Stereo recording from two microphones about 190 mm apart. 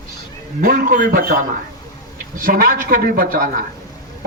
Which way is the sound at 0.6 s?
50° right (ahead or behind).